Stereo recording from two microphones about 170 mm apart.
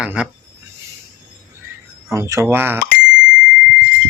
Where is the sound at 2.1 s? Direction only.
15° right (ahead or behind).